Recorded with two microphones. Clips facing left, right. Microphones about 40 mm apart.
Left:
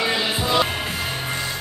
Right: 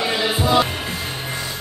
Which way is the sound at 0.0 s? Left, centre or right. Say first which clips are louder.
Right 2 dB; centre.